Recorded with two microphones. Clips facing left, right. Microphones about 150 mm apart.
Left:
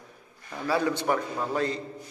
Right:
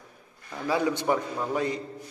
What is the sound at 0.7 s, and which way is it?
A man's voice, 15° right (ahead or behind).